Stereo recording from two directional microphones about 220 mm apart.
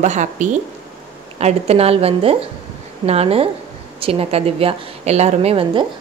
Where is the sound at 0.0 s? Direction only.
35° right (ahead or behind).